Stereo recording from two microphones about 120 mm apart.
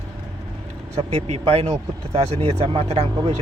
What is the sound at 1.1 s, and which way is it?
Speech, 65° right (ahead or behind).